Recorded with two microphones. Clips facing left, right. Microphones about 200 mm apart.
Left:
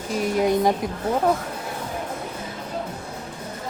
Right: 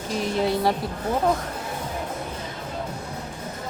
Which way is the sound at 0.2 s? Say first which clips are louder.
Left 3 dB; 15° left (ahead or behind).